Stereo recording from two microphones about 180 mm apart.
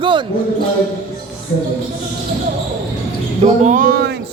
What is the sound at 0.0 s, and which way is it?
Basketball bounce, 25° right (ahead or behind).